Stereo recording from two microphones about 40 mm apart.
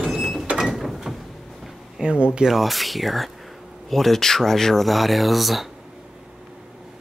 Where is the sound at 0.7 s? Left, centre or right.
Centre.